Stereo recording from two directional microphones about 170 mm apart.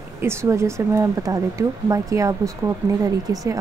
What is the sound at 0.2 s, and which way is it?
A woman's voice, 15° right (ahead or behind).